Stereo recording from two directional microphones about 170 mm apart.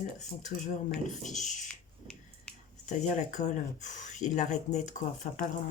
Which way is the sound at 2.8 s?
45° left (ahead or behind).